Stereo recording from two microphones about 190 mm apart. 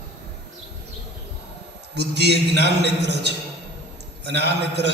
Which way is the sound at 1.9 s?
60° right (ahead or behind).